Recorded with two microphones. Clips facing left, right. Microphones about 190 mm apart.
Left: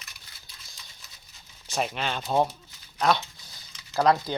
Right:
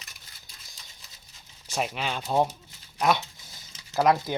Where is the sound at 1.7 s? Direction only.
5° right (ahead or behind).